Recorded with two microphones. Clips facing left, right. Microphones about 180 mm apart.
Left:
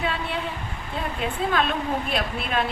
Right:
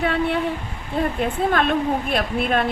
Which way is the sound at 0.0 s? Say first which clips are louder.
Right 7 dB; 55° right (ahead or behind).